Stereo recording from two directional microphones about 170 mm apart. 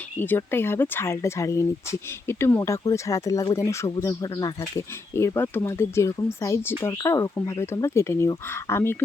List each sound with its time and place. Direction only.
0.2 s speech: 10° left (ahead or behind)